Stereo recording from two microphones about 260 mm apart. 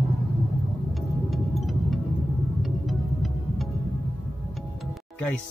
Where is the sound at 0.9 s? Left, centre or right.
Centre.